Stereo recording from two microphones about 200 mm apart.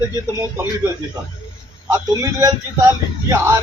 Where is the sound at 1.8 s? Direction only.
15° right (ahead or behind).